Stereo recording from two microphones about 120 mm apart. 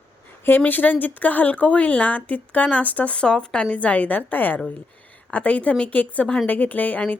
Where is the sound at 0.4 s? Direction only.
15° left (ahead or behind).